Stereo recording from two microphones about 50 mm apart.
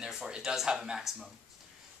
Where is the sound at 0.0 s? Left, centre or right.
Centre.